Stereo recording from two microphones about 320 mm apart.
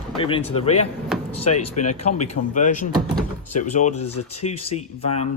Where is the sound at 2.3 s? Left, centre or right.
Left.